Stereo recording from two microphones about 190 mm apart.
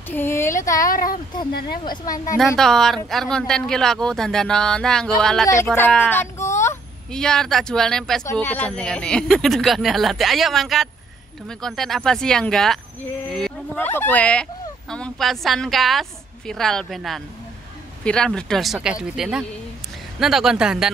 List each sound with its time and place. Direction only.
0.1 s speech: 10° left (ahead or behind)
0.8 s a sound: 45° left (ahead or behind)
1.7 s speech: 20° left (ahead or behind)
2.3 s speech: centre (ahead or behind)
5.8 s a sound: 10° left (ahead or behind)
7.1 s speech: 5° left (ahead or behind)